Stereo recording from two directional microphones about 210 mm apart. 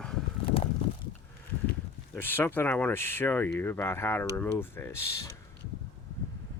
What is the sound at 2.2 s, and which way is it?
Speech, 10° left (ahead or behind).